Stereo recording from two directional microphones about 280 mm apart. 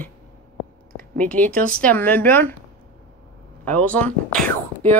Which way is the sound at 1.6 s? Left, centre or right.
Right.